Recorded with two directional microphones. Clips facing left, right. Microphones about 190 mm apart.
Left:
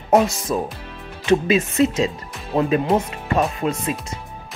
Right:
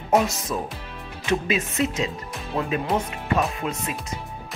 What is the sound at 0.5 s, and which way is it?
Speech, 35° left (ahead or behind).